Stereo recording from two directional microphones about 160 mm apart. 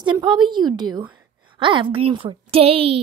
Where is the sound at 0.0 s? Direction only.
30° right (ahead or behind).